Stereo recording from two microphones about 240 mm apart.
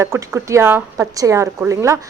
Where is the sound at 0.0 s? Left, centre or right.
Centre.